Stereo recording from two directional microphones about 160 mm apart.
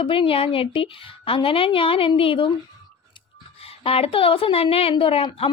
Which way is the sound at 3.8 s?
35° left (ahead or behind).